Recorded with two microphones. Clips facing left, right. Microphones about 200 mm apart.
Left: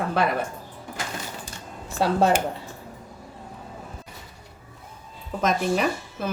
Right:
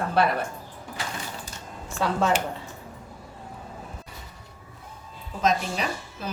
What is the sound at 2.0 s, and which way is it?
Speech, 35° left (ahead or behind).